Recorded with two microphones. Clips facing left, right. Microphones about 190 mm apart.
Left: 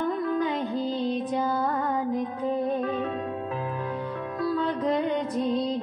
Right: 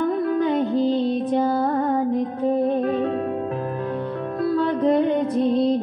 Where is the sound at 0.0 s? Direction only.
55° right (ahead or behind).